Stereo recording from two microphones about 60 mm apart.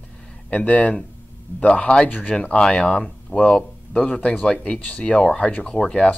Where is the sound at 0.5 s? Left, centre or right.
Left.